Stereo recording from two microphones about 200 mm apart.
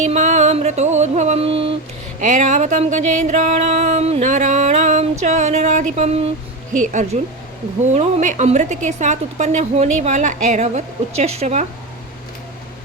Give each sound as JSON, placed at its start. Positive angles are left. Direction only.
{"t": 0.0, "sound": "music", "side_deg": -35}
{"t": 2.2, "sound": "a sound", "side_deg": -35}
{"t": 6.8, "sound": "a woman's voice", "side_deg": -40}